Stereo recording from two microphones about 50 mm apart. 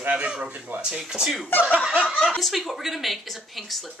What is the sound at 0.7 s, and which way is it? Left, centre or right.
Speech, centre.